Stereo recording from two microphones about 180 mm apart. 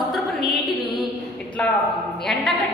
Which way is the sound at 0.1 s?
Centre (ahead or behind).